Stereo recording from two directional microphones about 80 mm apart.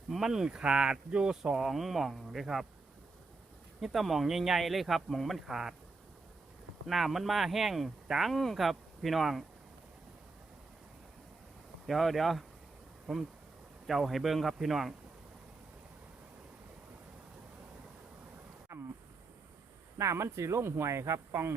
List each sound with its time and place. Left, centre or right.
0.1 s speech: centre
3.8 s speech: centre
6.8 s speech: centre
11.9 s speech: centre
18.7 s a sound: right
20.0 s speech: right